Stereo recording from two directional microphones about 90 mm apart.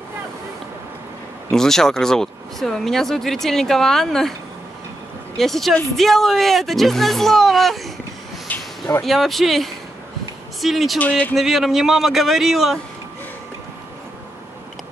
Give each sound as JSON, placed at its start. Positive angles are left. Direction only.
{"t": 1.5, "sound": "speech", "side_deg": 5}
{"t": 5.4, "sound": "speech", "side_deg": 0}
{"t": 8.5, "sound": "a sound", "side_deg": 20}
{"t": 9.0, "sound": "speech", "side_deg": 0}
{"t": 11.0, "sound": "speech", "side_deg": 15}
{"t": 11.3, "sound": "speech", "side_deg": 0}